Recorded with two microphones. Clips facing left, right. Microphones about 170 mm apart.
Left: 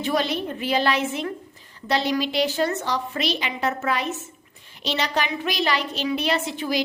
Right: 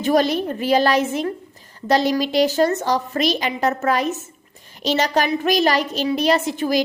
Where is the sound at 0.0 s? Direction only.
45° right (ahead or behind).